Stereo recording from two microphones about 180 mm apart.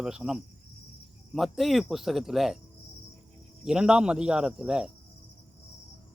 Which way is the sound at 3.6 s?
5° right (ahead or behind).